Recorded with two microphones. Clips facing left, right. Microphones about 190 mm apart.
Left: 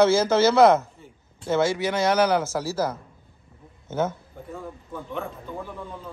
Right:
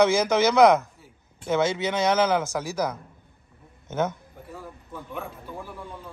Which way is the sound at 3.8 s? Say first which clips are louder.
Left 1 dB; 20° right (ahead or behind).